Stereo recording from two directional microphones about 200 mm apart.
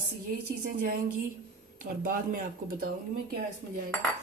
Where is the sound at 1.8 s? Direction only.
45° right (ahead or behind).